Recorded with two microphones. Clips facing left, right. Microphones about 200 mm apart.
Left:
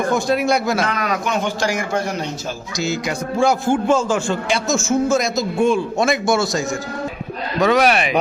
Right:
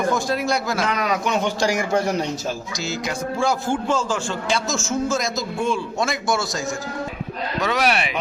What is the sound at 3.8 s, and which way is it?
A man's voice, 55° left (ahead or behind).